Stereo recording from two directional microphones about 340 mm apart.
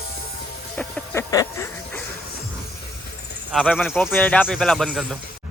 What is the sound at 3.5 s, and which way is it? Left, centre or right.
Speech, centre.